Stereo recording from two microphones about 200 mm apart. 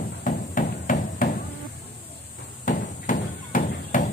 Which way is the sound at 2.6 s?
40° left (ahead or behind).